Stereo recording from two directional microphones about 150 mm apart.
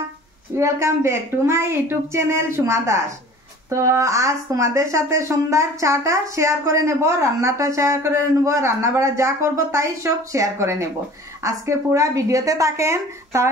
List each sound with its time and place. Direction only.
0.6 s a woman's voice: 20° right (ahead or behind)